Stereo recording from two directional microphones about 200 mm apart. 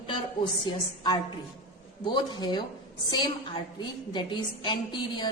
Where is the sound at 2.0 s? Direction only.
20° left (ahead or behind).